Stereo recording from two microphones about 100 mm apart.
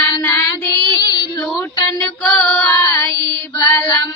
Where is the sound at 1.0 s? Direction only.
45° left (ahead or behind).